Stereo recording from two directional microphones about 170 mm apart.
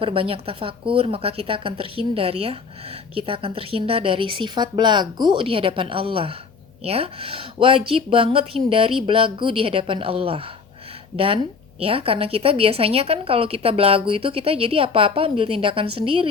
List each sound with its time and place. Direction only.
0.0 s a woman's voice: 30° right (ahead or behind)
11.8 s a woman's voice: 35° right (ahead or behind)